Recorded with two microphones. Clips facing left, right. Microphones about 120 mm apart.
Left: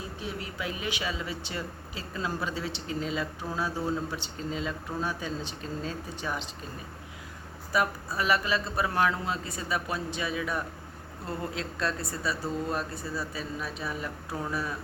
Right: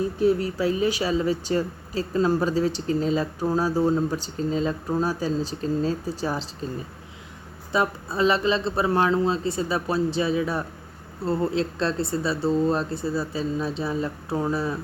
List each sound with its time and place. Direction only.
0.2 s speech: 40° right (ahead or behind)
7.7 s speech: 25° right (ahead or behind)